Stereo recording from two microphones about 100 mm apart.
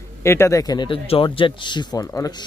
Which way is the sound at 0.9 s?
65° left (ahead or behind).